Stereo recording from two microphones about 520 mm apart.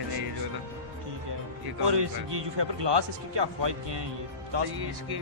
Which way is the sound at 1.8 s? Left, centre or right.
Right.